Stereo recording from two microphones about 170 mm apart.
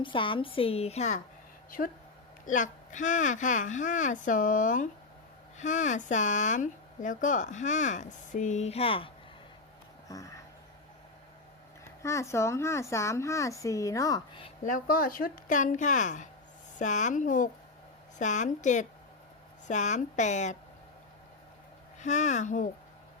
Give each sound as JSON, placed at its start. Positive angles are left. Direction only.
{"t": 0.0, "sound": "a woman's voice", "side_deg": 30}
{"t": 2.5, "sound": "speech", "side_deg": 50}
{"t": 10.1, "sound": "speech", "side_deg": 20}
{"t": 12.0, "sound": "speech", "side_deg": 15}
{"t": 14.6, "sound": "speech", "side_deg": 55}
{"t": 22.0, "sound": "speech", "side_deg": 45}